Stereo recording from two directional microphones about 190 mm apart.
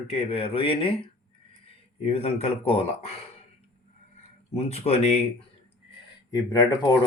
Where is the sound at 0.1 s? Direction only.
30° left (ahead or behind).